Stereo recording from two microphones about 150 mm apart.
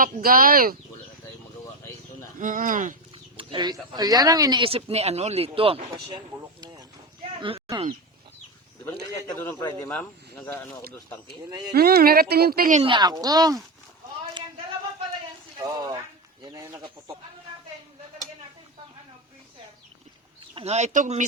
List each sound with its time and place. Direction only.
0.0 s speech: 75° right (ahead or behind)
2.4 s speech: 60° right (ahead or behind)
3.3 s a woman's voice: 30° right (ahead or behind)
4.6 s speech: 40° right (ahead or behind)
6.1 s a sound: 25° right (ahead or behind)
9.1 s a man's voice: 20° left (ahead or behind)
9.9 s speech: 10° left (ahead or behind)
11.4 s a woman's voice: 25° right (ahead or behind)
11.7 s speech: 90° right
12.8 s a woman's voice: 30° right (ahead or behind)
15.5 s speech: 25° right (ahead or behind)
20.4 s speech: 35° right (ahead or behind); by 21.2 s 55° right (ahead or behind)